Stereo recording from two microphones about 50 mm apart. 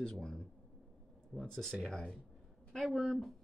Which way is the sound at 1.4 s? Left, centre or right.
Centre.